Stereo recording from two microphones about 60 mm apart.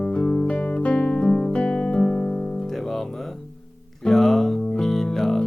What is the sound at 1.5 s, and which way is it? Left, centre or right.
Music, centre.